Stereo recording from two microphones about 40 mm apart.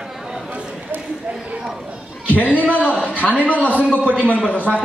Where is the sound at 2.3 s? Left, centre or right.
Left.